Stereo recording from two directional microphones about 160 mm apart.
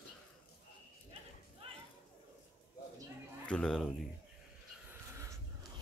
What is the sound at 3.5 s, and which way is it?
Speech, 5° left (ahead or behind).